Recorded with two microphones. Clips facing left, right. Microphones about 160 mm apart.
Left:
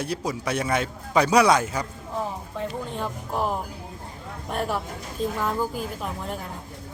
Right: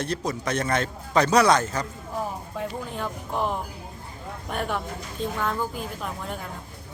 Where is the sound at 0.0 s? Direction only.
10° left (ahead or behind).